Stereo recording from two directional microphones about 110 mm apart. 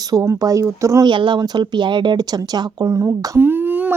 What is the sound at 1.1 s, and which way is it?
A woman's voice, 45° right (ahead or behind).